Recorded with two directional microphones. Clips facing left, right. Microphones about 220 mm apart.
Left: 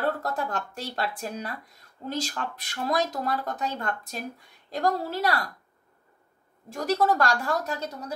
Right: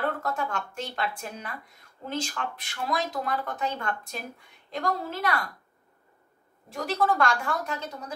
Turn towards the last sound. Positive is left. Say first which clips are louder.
# left 3 dB
turn(degrees=40)  # may be behind; listen again after turning